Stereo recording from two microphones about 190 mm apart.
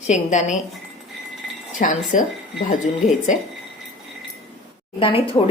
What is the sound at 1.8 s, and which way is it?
A woman's voice, 45° left (ahead or behind).